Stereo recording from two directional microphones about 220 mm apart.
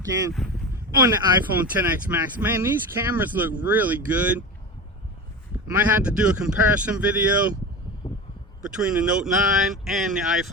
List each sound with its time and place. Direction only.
1.0 s speech: 10° right (ahead or behind)
5.7 s speech: 5° right (ahead or behind)
8.0 s a sound: 25° left (ahead or behind)
8.6 s speech: 5° right (ahead or behind)